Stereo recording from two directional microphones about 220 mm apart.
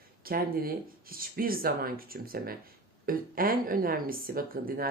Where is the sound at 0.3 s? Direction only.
40° right (ahead or behind).